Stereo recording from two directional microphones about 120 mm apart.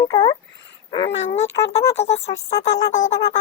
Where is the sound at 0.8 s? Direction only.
45° left (ahead or behind).